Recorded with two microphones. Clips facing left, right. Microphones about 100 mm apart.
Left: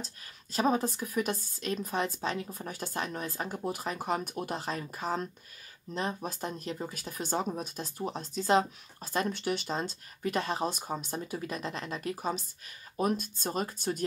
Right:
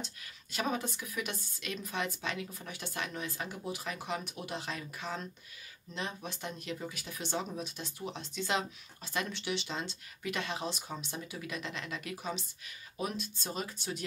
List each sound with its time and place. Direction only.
0.0 s speech: 35° left (ahead or behind)